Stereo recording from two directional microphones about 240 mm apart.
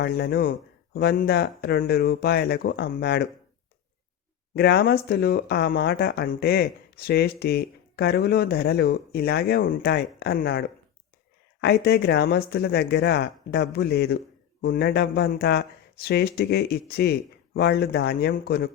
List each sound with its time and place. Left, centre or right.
0.0 s speech: left
4.5 s speech: left